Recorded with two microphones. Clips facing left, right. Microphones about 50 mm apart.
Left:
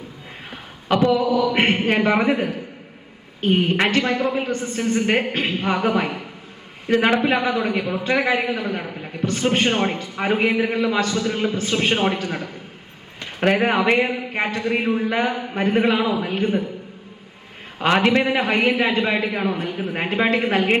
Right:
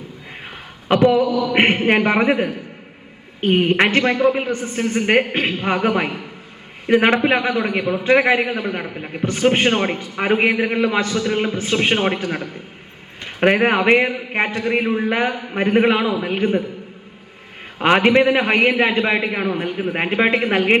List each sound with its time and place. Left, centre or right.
1.1 s a man's voice: right
3.4 s a woman's voice: right
13.4 s a man's voice: right
17.7 s a man's voice: right